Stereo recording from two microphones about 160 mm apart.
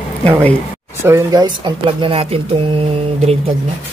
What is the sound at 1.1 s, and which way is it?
Speech, 25° right (ahead or behind).